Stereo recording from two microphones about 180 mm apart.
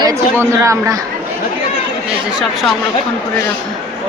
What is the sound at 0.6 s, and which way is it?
Speech, 20° right (ahead or behind).